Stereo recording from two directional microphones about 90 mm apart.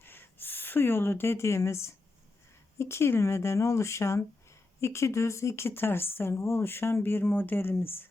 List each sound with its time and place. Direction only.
0.0 s speech: 25° left (ahead or behind)